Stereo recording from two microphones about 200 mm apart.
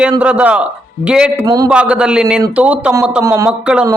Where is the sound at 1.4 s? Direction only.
20° right (ahead or behind).